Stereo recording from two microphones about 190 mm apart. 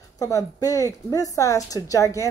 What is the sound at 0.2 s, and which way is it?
Speech, 15° left (ahead or behind).